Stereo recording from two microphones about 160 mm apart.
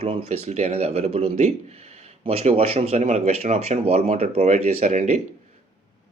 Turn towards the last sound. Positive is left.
turn(degrees=-45)  # may be behind; listen again after turning